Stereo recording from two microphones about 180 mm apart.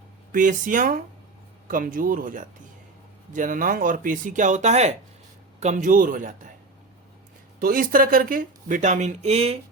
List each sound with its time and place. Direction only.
0.3 s speech: 45° right (ahead or behind)
7.6 s speech: 50° right (ahead or behind); by 9.6 s 35° right (ahead or behind)